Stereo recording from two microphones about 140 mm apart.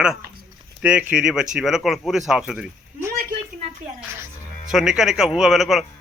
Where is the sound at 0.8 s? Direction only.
10° right (ahead or behind).